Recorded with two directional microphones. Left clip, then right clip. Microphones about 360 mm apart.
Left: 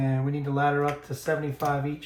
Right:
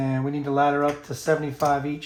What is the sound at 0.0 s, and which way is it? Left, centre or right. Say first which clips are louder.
Speech: right 3 dB; right.